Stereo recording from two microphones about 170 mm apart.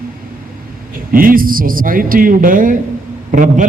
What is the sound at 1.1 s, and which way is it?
A man's voice, 55° right (ahead or behind).